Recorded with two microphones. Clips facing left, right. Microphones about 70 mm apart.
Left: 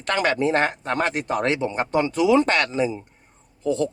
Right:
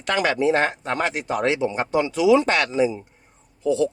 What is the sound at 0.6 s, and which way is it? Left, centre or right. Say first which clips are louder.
Speech: even; centre.